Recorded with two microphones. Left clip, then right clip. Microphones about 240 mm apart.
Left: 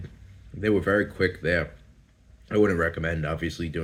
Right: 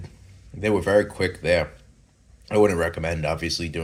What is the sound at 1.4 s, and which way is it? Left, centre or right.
Speech, right.